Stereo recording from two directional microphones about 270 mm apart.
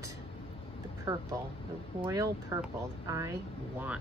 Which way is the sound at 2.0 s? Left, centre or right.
Centre.